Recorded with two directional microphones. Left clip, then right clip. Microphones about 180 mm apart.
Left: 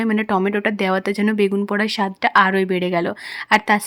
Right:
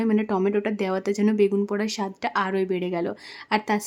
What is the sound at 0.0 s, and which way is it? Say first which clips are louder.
Speech: left 4 dB; 10° left (ahead or behind).